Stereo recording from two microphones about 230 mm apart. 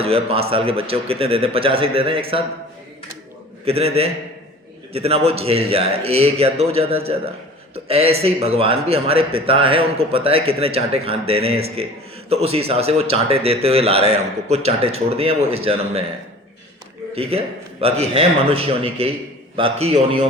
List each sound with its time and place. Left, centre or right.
0.0 s speech: right
3.7 s speech: right
17.2 s speech: right